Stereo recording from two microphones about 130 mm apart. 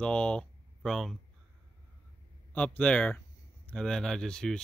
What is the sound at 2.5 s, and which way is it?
Speech, 10° left (ahead or behind).